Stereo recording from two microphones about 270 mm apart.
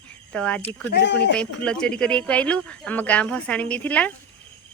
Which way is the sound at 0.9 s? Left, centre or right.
Left.